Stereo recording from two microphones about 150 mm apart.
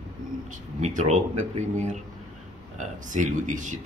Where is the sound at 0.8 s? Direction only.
50° right (ahead or behind).